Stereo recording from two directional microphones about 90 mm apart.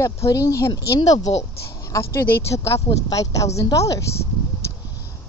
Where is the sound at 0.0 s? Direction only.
35° left (ahead or behind).